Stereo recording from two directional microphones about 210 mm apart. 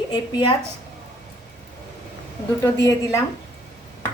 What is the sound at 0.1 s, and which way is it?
Speech, 20° left (ahead or behind).